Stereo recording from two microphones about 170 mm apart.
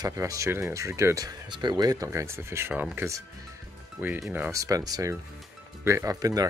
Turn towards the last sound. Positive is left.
turn(degrees=-20)  # may be behind; listen again after turning